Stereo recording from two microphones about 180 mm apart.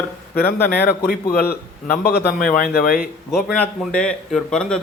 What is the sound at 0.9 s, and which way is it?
A man's voice, 50° left (ahead or behind).